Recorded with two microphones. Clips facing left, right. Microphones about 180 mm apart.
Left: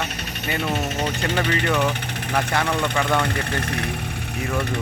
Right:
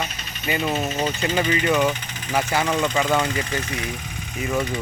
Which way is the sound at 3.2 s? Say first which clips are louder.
Even; 60° left (ahead or behind).